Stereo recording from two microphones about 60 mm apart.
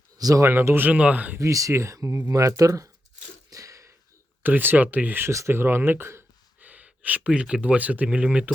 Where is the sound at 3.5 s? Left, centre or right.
Right.